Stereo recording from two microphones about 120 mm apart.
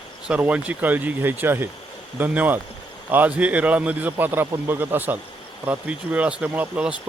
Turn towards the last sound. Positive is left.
turn(degrees=-10)  # may be behind; listen again after turning